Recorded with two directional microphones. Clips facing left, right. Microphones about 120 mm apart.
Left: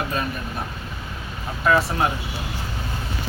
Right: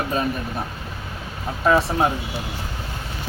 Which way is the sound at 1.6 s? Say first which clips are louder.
Right 2 dB; 25° right (ahead or behind).